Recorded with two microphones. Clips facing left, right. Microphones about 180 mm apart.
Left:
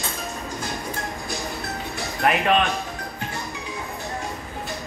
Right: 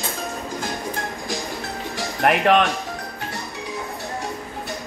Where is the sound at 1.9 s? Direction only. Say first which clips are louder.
Right 3 dB; 70° right (ahead or behind).